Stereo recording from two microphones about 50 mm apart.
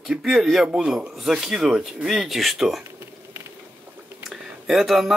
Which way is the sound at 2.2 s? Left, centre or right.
Centre.